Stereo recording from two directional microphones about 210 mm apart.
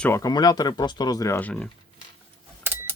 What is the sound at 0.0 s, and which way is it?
Speech, 15° left (ahead or behind).